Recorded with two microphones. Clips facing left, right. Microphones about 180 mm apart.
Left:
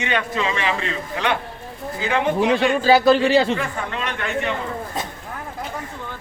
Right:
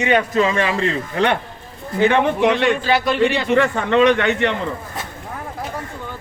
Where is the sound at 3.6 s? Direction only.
75° right (ahead or behind).